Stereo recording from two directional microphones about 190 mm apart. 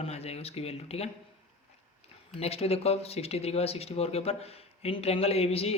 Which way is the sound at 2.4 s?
30° left (ahead or behind).